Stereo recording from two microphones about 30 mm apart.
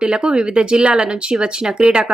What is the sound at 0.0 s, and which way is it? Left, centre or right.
A woman's voice, right.